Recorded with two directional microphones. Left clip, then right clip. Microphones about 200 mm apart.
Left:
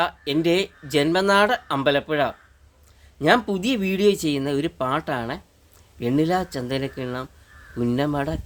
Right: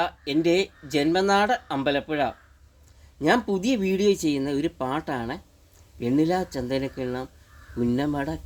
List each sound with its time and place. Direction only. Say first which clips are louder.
0.0 s speech: left 2 dB; 20° left (ahead or behind)